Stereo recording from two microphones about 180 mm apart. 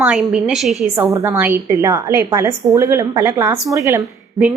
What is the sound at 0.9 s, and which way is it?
A woman's voice, 15° right (ahead or behind).